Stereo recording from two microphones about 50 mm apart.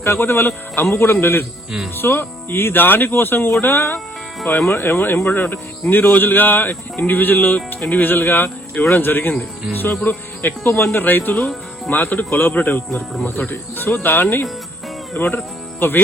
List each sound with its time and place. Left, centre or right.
0.0 s speech: left
10.7 s speech: left